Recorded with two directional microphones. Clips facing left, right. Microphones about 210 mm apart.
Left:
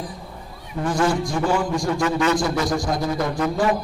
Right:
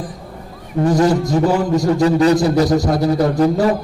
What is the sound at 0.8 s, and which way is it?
A man's voice, 40° right (ahead or behind).